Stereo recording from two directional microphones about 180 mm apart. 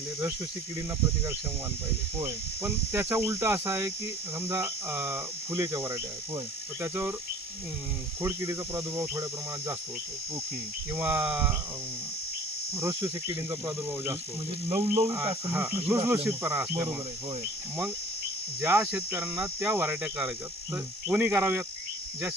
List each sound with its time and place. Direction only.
2.1 s speech: 15° right (ahead or behind)
8.2 s speech: 15° right (ahead or behind)
10.9 s speech: 10° right (ahead or behind)
12.7 s speech: 15° right (ahead or behind)
18.6 s speech: 10° right (ahead or behind)